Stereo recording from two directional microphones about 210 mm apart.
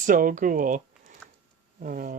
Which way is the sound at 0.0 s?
40° right (ahead or behind).